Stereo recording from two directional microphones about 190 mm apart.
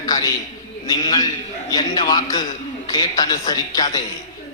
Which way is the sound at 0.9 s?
20° left (ahead or behind).